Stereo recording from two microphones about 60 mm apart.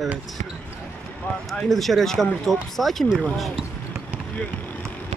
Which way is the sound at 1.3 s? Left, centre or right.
Left.